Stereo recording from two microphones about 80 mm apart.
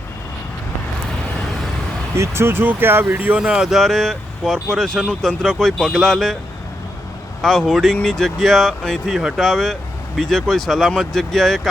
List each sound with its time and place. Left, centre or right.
2.1 s speech: right
3.4 s speech: centre
5.4 s speech: centre
7.4 s speech: centre